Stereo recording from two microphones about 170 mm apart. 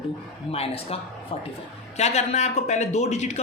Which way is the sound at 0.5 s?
35° left (ahead or behind).